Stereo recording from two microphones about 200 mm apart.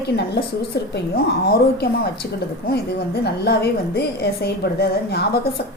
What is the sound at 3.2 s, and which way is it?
A woman's voice, 55° left (ahead or behind).